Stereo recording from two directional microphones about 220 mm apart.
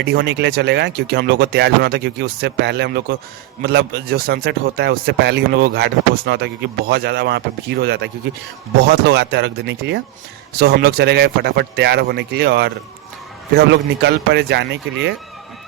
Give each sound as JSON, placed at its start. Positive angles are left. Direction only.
{"t": 0.0, "sound": "speech", "side_deg": -50}